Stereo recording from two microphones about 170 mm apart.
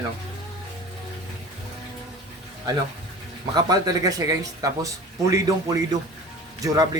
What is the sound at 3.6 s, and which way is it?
A woman's voice, 25° right (ahead or behind).